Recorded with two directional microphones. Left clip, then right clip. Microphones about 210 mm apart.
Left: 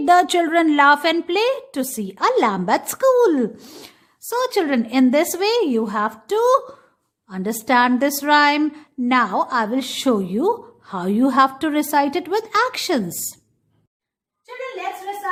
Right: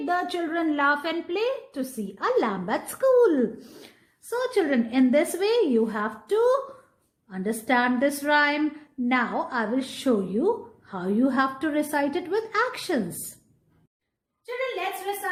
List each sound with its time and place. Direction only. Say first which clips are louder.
0.0 s a woman's voice: left 12 dB; 35° left (ahead or behind)